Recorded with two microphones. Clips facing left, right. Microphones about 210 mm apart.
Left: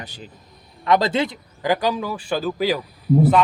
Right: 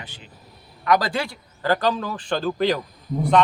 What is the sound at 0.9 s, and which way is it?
A man's voice, 25° left (ahead or behind).